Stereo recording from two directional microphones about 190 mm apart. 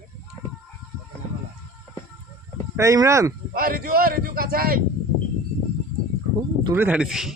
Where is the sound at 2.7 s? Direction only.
15° right (ahead or behind).